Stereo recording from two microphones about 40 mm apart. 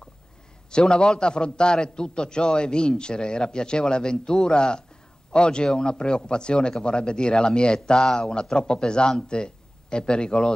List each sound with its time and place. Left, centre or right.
0.7 s a man's voice: left